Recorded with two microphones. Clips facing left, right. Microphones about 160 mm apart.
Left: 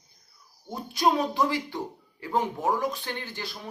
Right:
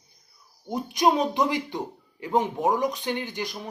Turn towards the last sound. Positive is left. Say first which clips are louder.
# right 5 dB
turn(degrees=-15)  # may be behind; listen again after turning